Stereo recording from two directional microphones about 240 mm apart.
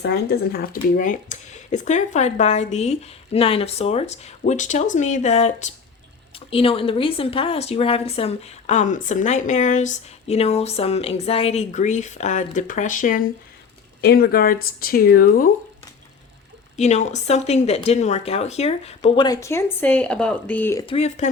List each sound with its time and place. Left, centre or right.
0.0 s a woman's voice: left
16.7 s a woman's voice: left; by 20.8 s centre
20.8 s a woman's voice: left